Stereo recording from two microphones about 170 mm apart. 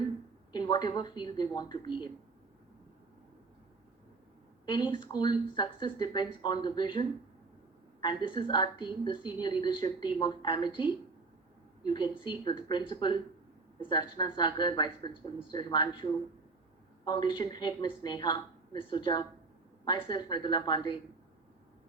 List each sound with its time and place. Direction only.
0.5 s speech: 25° left (ahead or behind)
4.6 s speech: 30° left (ahead or behind)
8.0 s speech: 30° left (ahead or behind)
11.9 s speech: 25° left (ahead or behind)
17.1 s speech: 30° left (ahead or behind)